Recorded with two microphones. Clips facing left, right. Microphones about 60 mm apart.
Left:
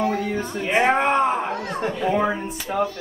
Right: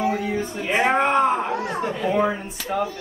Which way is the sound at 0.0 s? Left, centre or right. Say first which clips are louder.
Even; centre.